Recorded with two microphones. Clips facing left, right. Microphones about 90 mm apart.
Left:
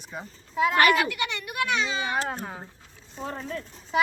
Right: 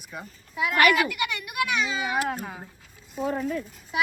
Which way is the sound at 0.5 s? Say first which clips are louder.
Left 1 dB; 35° left (ahead or behind).